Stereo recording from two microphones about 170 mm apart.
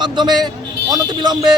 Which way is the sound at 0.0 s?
25° right (ahead or behind).